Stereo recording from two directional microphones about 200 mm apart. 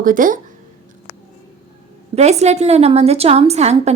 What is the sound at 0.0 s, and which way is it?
Speech, 45° right (ahead or behind).